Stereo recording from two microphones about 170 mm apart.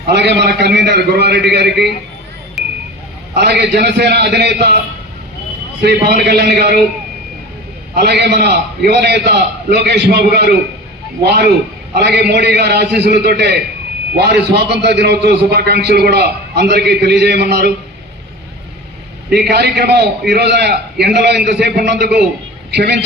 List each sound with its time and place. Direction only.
0.1 s a man's voice: 85° right
2.6 s a sound: centre (ahead or behind)
3.3 s a man's voice: 75° right (ahead or behind)
5.8 s a man's voice: 75° right (ahead or behind)
7.9 s a man's voice: 75° right (ahead or behind)
19.3 s a man's voice: 75° right (ahead or behind)